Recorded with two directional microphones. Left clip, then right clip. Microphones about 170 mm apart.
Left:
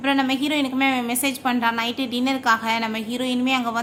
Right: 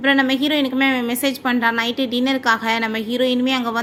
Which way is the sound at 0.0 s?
20° right (ahead or behind).